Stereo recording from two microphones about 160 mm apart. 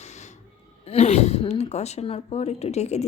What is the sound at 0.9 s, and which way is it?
Speech, 45° left (ahead or behind).